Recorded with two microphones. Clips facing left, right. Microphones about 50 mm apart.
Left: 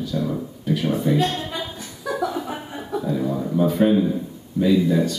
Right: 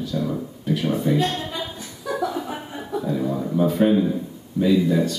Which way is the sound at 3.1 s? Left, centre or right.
Centre.